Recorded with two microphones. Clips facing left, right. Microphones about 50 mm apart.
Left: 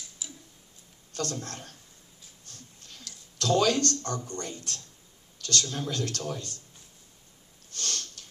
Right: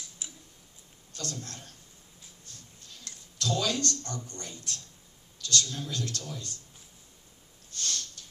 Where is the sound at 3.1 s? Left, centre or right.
Right.